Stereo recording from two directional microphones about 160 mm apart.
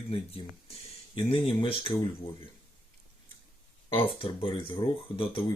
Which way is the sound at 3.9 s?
35° left (ahead or behind).